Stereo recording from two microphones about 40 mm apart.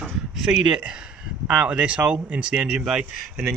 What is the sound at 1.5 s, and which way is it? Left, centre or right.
Speech, right.